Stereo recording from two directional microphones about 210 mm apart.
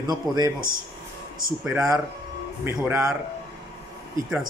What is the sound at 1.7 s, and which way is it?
A man's voice, 15° right (ahead or behind).